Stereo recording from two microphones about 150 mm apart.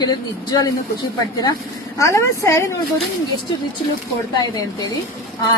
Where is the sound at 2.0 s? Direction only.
20° left (ahead or behind).